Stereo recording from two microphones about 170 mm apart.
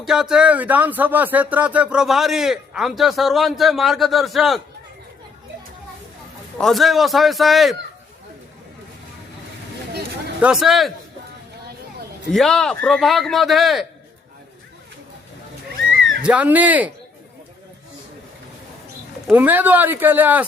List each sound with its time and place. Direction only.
0.0 s speech: 5° right (ahead or behind)
6.6 s speech: centre (ahead or behind)
10.4 s speech: 5° right (ahead or behind)
12.3 s speech: 5° left (ahead or behind)
16.2 s speech: 10° right (ahead or behind)
19.3 s speech: 10° right (ahead or behind)